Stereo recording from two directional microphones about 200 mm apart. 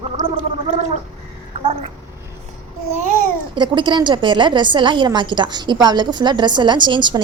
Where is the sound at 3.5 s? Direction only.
25° right (ahead or behind).